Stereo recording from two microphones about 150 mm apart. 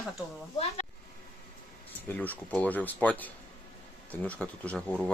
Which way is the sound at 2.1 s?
10° left (ahead or behind).